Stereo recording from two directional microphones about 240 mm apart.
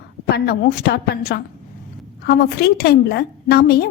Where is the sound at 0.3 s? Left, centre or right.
Left.